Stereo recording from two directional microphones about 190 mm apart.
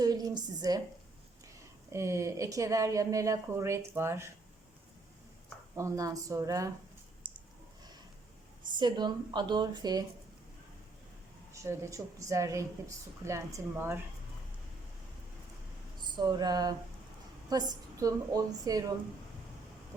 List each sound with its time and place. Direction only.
0.0 s a woman's voice: 20° right (ahead or behind)
1.9 s a woman's voice: 15° right (ahead or behind)
5.7 s a woman's voice: 15° right (ahead or behind)
8.8 s a woman's voice: 25° right (ahead or behind)
11.5 s a woman's voice: 15° right (ahead or behind)
16.1 s a woman's voice: 20° right (ahead or behind)